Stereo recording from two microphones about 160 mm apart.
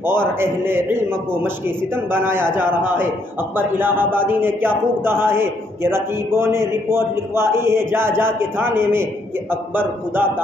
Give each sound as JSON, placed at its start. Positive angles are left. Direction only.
{"t": 0.0, "sound": "speech", "side_deg": -15}